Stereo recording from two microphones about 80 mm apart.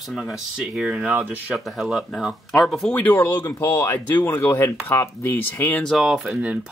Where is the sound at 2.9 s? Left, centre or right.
Centre.